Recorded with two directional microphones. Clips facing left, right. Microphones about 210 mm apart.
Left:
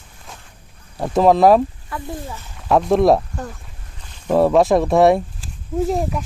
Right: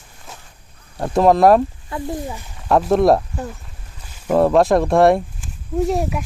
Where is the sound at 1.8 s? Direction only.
20° right (ahead or behind).